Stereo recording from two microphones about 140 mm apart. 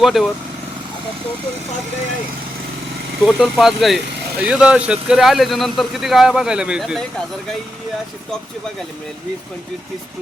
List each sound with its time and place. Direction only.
0.0 s speech: centre (ahead or behind)
3.2 s speech: centre (ahead or behind)